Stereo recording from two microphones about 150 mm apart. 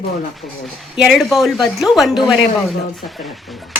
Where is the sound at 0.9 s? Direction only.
Centre (ahead or behind).